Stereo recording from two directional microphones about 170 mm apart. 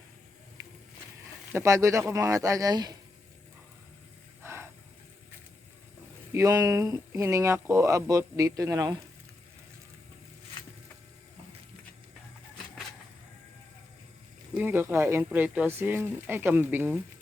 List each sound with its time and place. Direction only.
1.5 s speech: 20° right (ahead or behind)
4.4 s a sound: 15° right (ahead or behind)
6.3 s speech: 20° right (ahead or behind)
14.5 s speech: 10° right (ahead or behind)